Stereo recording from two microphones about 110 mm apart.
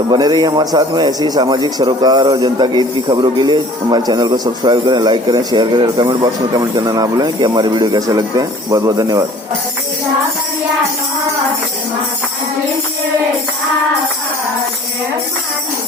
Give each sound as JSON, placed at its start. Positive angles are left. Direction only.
{"t": 0.1, "sound": "a man's voice", "side_deg": -40}